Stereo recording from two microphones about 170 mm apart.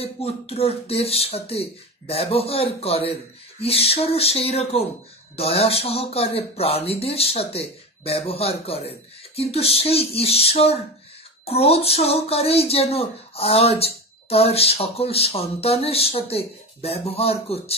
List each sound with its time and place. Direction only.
0.0 s speech: 35° left (ahead or behind)